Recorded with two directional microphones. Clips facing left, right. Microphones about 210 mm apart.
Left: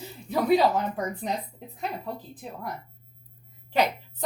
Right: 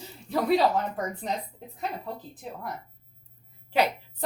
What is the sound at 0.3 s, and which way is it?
A woman's voice, centre (ahead or behind).